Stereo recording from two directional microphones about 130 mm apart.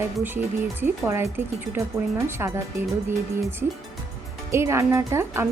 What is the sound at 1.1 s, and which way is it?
A woman's voice, 20° right (ahead or behind).